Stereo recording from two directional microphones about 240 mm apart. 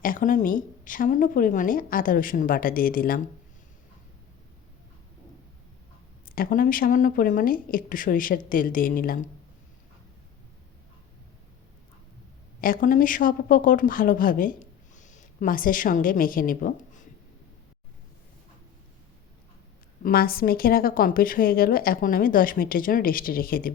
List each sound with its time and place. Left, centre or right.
0.0 s a woman's voice: left
6.2 s a woman's voice: left
12.6 s a woman's voice: left
20.0 s a woman's voice: left